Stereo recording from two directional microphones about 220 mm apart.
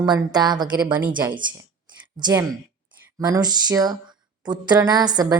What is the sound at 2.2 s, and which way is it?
A woman's voice, 20° right (ahead or behind).